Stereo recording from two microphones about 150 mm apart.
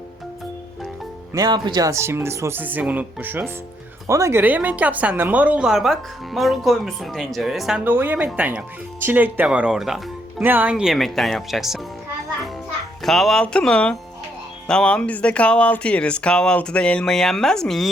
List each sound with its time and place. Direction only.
1.3 s speech: 25° right (ahead or behind); by 7.8 s centre (ahead or behind)
7.9 s speech: 15° right (ahead or behind)
13.0 s speech: centre (ahead or behind)